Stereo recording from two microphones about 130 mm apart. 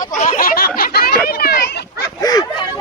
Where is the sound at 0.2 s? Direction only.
90° left.